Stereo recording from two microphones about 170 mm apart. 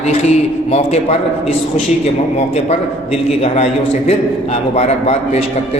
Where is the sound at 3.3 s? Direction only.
40° left (ahead or behind).